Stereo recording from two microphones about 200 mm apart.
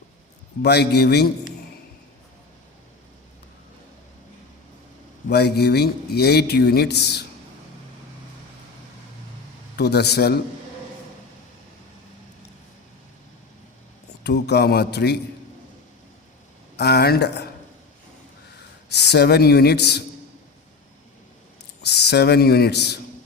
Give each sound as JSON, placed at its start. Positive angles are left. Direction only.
{"t": 0.6, "sound": "speech", "side_deg": 55}
{"t": 5.3, "sound": "speech", "side_deg": 55}
{"t": 9.7, "sound": "speech", "side_deg": 55}
{"t": 14.3, "sound": "speech", "side_deg": 55}
{"t": 16.7, "sound": "speech", "side_deg": 55}
{"t": 18.9, "sound": "speech", "side_deg": 55}
{"t": 21.8, "sound": "speech", "side_deg": 55}